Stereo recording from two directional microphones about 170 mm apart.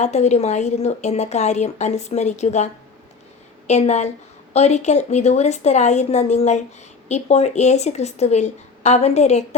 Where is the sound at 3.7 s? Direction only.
40° left (ahead or behind).